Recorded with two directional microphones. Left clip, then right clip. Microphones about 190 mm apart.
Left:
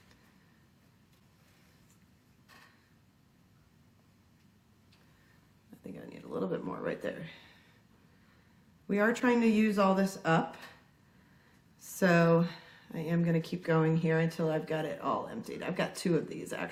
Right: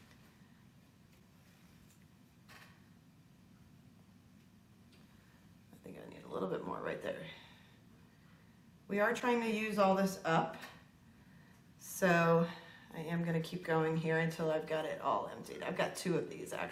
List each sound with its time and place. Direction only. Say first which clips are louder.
5.8 s a sound: left 4 dB; 35° right (ahead or behind)
8.9 s speech: left 4 dB; 50° right (ahead or behind)
11.8 s speech: left 4 dB; 45° right (ahead or behind)